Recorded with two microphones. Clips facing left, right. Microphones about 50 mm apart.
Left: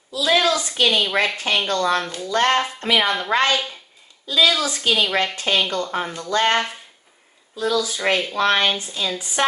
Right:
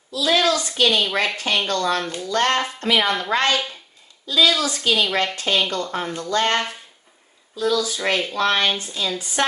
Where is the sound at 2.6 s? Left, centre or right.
Centre.